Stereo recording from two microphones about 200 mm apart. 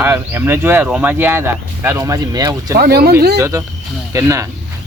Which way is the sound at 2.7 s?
50° right (ahead or behind).